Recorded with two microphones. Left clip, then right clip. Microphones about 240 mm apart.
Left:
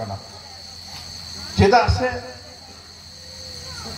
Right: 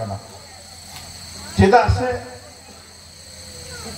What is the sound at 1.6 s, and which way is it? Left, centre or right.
Speech, left.